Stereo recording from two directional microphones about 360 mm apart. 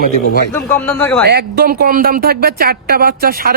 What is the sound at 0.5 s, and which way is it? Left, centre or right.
Speech, centre.